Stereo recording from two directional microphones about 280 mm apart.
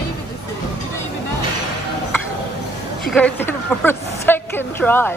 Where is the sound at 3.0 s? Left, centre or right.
Centre.